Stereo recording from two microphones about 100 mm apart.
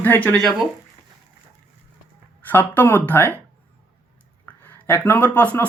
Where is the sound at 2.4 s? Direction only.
20° left (ahead or behind).